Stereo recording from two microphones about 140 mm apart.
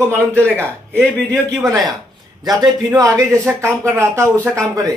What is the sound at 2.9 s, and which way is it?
Speech, 25° right (ahead or behind).